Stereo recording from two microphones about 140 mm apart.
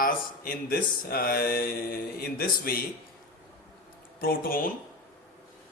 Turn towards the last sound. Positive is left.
turn(degrees=90)